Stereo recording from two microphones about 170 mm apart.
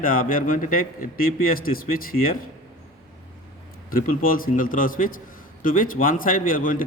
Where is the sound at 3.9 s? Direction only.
55° left (ahead or behind).